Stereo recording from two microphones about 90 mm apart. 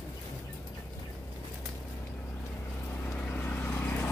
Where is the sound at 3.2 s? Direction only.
15° left (ahead or behind).